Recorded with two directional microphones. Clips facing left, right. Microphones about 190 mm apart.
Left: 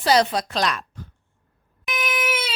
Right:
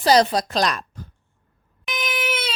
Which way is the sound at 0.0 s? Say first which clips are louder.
Right 2 dB; 40° right (ahead or behind).